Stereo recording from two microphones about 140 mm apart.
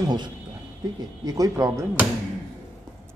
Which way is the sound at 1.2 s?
25° right (ahead or behind).